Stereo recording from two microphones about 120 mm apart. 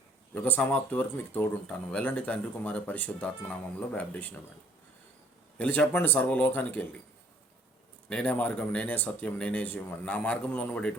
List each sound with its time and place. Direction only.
0.3 s speech: 15° left (ahead or behind)
5.5 s speech: 10° left (ahead or behind)
8.1 s speech: 10° left (ahead or behind)